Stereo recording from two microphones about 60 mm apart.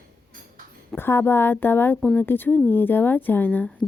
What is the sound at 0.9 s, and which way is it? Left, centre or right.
A woman's voice, left.